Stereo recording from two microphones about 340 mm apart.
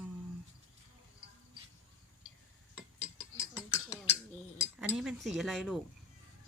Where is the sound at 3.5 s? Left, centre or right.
Centre.